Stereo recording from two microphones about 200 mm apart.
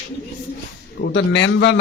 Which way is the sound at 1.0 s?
65° left (ahead or behind).